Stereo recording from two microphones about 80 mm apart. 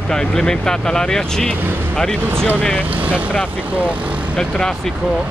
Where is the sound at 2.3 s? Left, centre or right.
Right.